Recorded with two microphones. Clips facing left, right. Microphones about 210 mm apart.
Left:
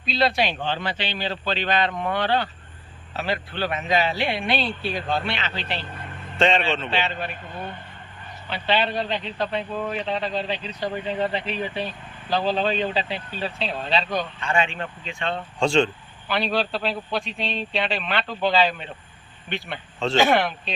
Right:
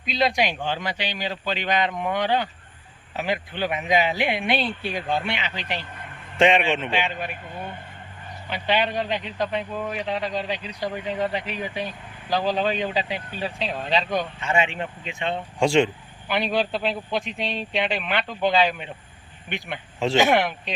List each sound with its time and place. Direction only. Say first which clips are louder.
0.0 s a man's voice: even; 15° right (ahead or behind)